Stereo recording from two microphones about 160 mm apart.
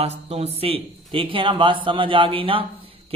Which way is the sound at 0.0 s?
40° right (ahead or behind).